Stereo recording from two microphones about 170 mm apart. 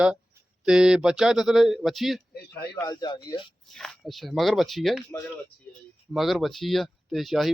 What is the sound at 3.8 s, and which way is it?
Speech, centre (ahead or behind).